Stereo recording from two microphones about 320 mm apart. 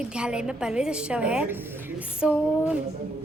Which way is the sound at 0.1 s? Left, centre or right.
Centre.